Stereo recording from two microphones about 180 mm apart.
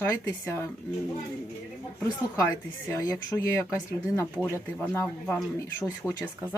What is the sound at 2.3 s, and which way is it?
Speech, 15° left (ahead or behind).